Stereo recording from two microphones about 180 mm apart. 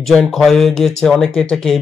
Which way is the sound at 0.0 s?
Centre (ahead or behind).